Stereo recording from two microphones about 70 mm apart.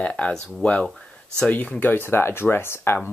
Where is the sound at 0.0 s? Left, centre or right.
Centre.